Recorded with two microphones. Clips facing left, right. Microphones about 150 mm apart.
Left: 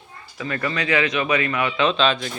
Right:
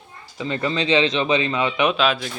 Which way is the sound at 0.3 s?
20° right (ahead or behind).